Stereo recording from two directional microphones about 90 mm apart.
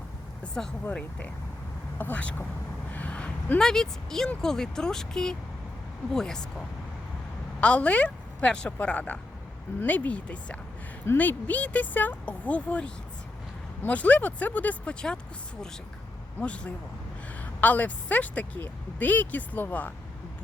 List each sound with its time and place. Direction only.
0.4 s a woman's voice: 10° left (ahead or behind)
2.9 s a sound: 15° left (ahead or behind)
4.3 s a woman's voice: 5° left (ahead or behind)
16.4 s a woman's voice: 15° left (ahead or behind)